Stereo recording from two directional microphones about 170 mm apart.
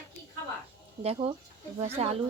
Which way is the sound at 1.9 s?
35° right (ahead or behind).